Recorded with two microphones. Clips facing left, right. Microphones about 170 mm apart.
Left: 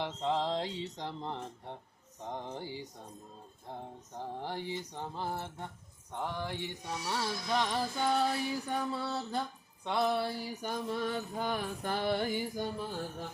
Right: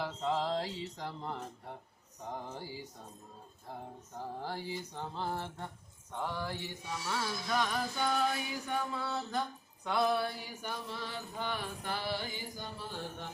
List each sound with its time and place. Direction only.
0.0 s speech: 25° left (ahead or behind)
4.1 s a sound: 20° left (ahead or behind)
6.1 s speech: 20° left (ahead or behind)
7.1 s music: 25° left (ahead or behind)
9.8 s mantra: 25° left (ahead or behind); by 12.6 s 55° left (ahead or behind)